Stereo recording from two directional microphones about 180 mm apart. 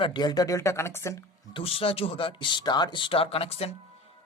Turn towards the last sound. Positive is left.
turn(degrees=35)  # may be behind; listen again after turning